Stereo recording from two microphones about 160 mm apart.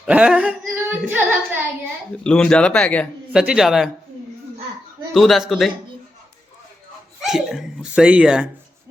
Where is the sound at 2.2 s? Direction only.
5° left (ahead or behind).